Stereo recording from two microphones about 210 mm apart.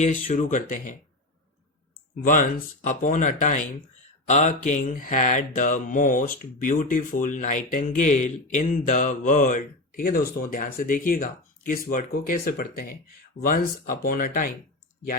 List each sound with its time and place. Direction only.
0.0 s speech: 35° left (ahead or behind)
2.2 s speech: 40° left (ahead or behind)